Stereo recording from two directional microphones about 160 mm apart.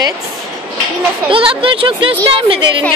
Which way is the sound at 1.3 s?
35° right (ahead or behind).